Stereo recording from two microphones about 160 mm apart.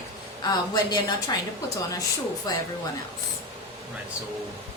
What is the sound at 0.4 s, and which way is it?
Speech, 25° left (ahead or behind).